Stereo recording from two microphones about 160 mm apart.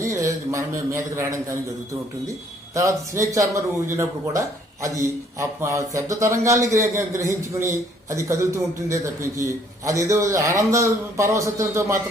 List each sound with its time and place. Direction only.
0.0 s a man's voice: 20° right (ahead or behind)
2.7 s speech: 20° right (ahead or behind)